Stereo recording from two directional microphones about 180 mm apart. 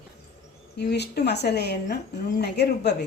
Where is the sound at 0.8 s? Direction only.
65° left (ahead or behind).